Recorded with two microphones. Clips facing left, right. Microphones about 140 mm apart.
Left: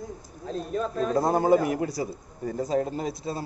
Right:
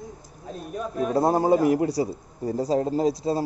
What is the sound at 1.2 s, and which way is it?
A man's voice, 30° right (ahead or behind).